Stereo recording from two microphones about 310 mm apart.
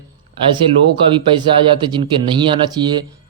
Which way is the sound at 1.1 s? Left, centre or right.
Centre.